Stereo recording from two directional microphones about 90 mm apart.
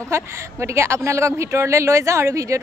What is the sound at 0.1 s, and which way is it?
A woman's voice, 30° right (ahead or behind).